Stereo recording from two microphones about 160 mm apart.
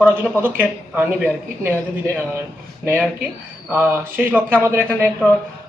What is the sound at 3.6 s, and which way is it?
Speech, 10° right (ahead or behind).